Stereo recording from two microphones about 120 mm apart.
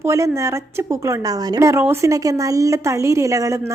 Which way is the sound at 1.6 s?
20° right (ahead or behind).